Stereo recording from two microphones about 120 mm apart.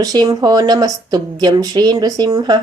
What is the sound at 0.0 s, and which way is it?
Speech, 35° right (ahead or behind).